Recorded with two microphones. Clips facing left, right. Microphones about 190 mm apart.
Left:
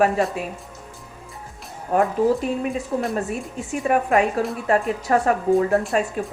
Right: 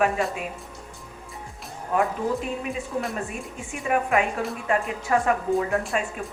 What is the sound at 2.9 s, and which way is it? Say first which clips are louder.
Speech: left 5 dB; 45° left (ahead or behind).